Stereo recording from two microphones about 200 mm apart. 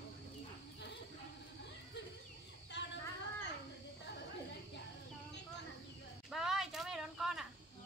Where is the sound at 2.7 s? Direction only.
60° left (ahead or behind).